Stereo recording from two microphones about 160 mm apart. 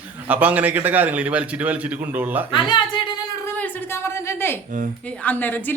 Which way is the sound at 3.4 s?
10° left (ahead or behind).